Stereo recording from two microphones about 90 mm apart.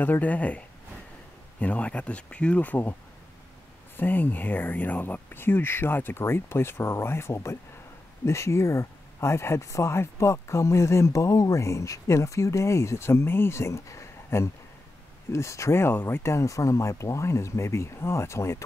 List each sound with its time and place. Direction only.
0.0 s speech: 20° left (ahead or behind)